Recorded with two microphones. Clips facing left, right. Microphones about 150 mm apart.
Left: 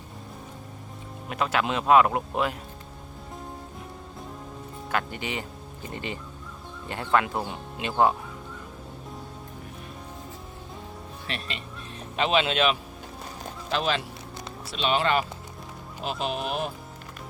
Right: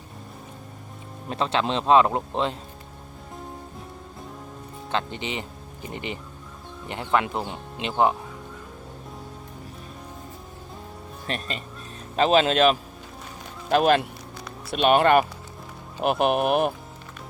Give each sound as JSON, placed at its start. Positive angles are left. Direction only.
{"t": 1.3, "sound": "speech", "side_deg": -30}
{"t": 4.9, "sound": "speech", "side_deg": -25}
{"t": 11.3, "sound": "speech", "side_deg": -40}
{"t": 13.7, "sound": "speech", "side_deg": -50}